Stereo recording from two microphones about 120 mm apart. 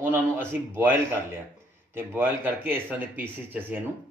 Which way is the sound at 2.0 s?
15° right (ahead or behind).